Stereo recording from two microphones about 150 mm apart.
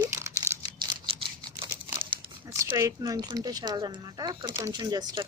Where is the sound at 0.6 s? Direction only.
30° right (ahead or behind).